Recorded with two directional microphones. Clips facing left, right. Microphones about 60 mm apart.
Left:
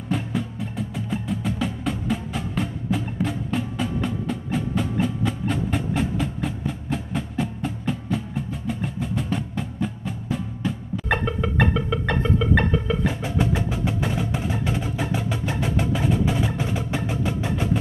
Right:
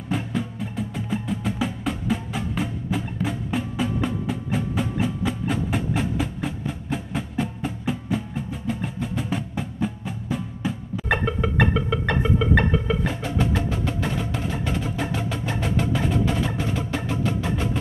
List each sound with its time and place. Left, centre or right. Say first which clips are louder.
0.1 s music: even; centre